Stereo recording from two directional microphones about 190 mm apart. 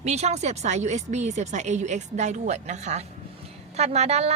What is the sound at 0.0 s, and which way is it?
A woman's voice, 35° right (ahead or behind).